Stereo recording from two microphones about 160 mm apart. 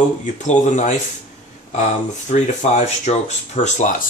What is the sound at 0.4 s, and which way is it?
Speech, 45° left (ahead or behind).